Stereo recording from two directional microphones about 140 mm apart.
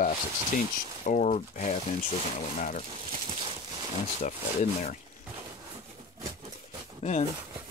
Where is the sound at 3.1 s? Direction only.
35° right (ahead or behind).